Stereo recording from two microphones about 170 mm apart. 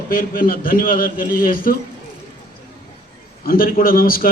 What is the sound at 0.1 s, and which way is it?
A man's voice, 55° left (ahead or behind).